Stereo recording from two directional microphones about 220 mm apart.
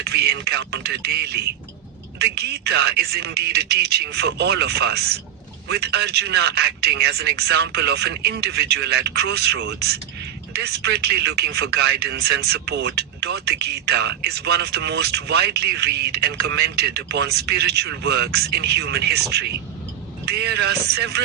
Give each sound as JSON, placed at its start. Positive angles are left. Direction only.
{"t": 0.0, "sound": "speech", "side_deg": -50}
{"t": 20.2, "sound": "speech", "side_deg": -50}